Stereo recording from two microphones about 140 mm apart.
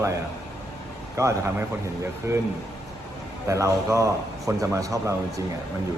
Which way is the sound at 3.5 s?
20° right (ahead or behind).